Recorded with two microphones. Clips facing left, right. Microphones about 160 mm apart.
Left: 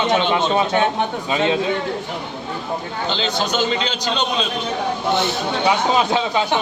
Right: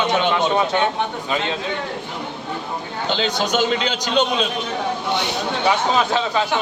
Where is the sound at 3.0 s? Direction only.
10° right (ahead or behind).